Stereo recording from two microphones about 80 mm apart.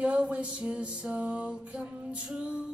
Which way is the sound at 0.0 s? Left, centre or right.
Centre.